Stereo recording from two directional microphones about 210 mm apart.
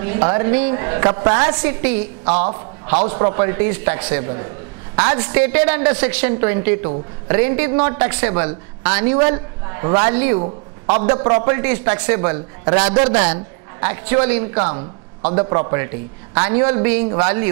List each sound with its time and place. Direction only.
0.0 s a man's voice: 20° right (ahead or behind)
2.3 s a man's voice: 30° right (ahead or behind)
10.3 s a man's voice: 30° right (ahead or behind)
13.7 s a woman's voice: 15° right (ahead or behind)